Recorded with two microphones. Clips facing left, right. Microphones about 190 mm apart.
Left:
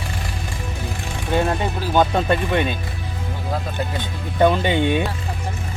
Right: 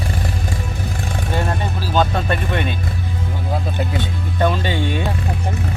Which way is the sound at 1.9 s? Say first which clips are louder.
Left 1 dB; 20° left (ahead or behind).